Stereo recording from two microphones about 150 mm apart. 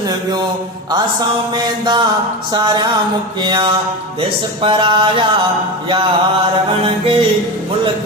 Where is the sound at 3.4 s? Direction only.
30° right (ahead or behind).